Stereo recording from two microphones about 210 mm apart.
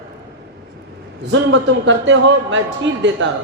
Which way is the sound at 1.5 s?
60° right (ahead or behind).